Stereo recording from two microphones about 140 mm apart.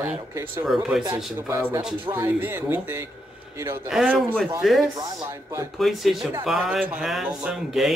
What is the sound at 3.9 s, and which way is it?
Speech, centre (ahead or behind).